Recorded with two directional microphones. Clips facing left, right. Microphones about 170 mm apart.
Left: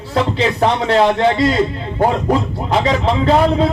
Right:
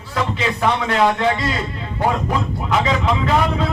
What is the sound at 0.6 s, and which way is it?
A man's voice, 30° left (ahead or behind).